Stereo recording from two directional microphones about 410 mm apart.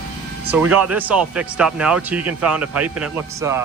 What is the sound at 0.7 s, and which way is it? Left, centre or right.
Speech, centre.